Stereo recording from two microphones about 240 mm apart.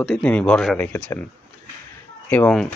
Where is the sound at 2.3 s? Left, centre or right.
Centre.